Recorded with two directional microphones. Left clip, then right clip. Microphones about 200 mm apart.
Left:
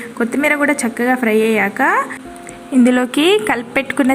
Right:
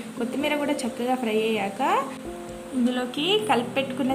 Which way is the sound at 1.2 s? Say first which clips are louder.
Left 11 dB; 50° left (ahead or behind).